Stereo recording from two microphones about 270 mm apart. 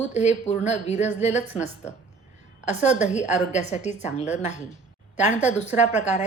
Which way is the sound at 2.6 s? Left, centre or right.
Left.